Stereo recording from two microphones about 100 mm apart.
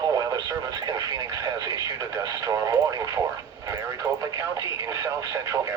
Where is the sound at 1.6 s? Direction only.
35° right (ahead or behind).